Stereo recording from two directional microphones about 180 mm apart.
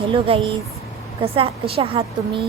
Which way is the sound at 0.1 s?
30° right (ahead or behind).